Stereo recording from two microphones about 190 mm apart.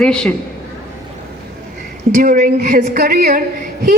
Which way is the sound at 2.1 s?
45° right (ahead or behind).